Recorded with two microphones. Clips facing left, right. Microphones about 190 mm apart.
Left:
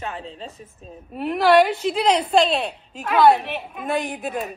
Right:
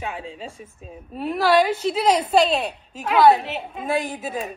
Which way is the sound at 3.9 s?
Centre (ahead or behind).